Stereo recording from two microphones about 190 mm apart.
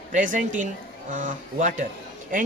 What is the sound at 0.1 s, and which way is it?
A woman's voice, 45° right (ahead or behind).